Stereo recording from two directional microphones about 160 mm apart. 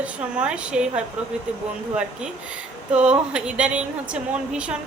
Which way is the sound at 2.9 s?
5° right (ahead or behind).